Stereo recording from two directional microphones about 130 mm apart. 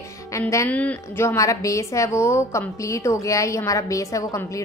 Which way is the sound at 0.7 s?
10° left (ahead or behind).